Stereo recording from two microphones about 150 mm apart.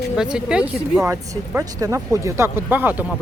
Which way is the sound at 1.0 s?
20° right (ahead or behind).